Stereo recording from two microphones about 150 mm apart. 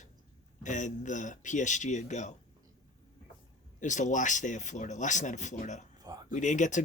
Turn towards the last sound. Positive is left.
turn(degrees=55)  # may be behind; listen again after turning